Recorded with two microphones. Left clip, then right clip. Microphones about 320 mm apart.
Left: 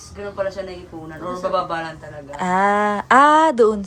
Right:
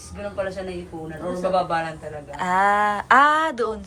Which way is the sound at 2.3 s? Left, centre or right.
Centre.